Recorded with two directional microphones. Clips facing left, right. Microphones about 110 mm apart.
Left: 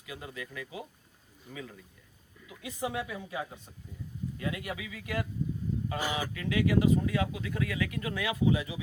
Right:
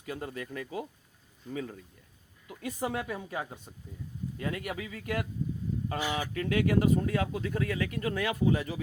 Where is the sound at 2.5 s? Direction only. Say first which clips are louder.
Right 2 dB; 45° right (ahead or behind).